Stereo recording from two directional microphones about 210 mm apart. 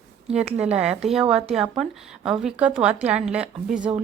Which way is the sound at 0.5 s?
5° right (ahead or behind).